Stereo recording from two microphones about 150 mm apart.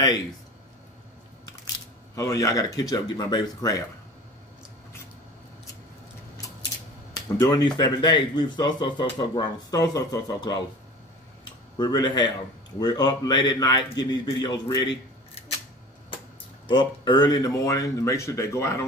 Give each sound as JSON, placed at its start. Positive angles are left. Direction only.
{"t": 2.1, "sound": "speech", "side_deg": 25}
{"t": 7.3, "sound": "speech", "side_deg": 25}
{"t": 11.8, "sound": "speech", "side_deg": 30}
{"t": 16.6, "sound": "speech", "side_deg": 30}